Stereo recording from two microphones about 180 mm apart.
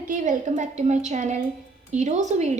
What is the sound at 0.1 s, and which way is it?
A woman's voice, 45° right (ahead or behind).